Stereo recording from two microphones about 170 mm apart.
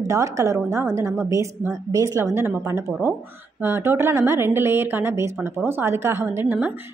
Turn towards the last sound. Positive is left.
turn(degrees=-10)  # may be behind; listen again after turning